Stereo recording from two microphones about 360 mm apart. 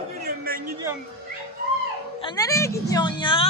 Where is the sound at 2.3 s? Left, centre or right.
Centre.